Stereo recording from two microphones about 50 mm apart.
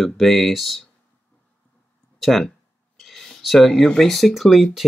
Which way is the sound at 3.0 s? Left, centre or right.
Centre.